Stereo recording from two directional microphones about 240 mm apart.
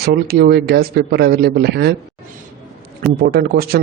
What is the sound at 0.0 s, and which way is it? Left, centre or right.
A man's voice, right.